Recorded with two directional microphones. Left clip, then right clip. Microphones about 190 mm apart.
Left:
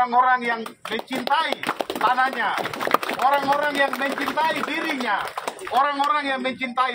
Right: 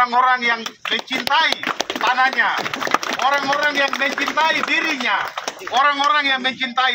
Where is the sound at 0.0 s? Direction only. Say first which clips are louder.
Right 3 dB; 15° left (ahead or behind).